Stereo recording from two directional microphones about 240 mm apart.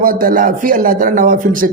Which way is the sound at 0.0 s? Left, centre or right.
Right.